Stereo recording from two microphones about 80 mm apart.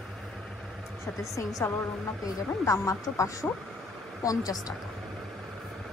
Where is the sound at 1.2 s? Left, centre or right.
Left.